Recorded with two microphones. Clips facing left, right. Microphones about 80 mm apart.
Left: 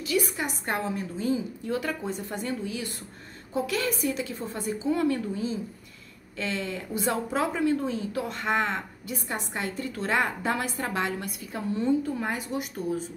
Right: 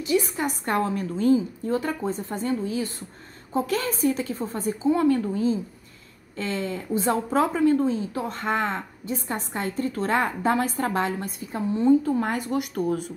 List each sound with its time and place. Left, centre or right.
0.0 s a woman's voice: right
0.4 s a woman's voice: right
1.7 s a woman's voice: right
12.2 s a woman's voice: right